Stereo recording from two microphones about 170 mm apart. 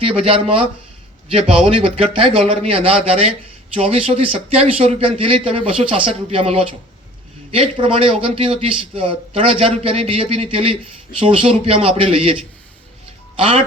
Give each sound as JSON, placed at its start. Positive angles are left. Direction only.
{"t": 0.0, "sound": "speech", "side_deg": -35}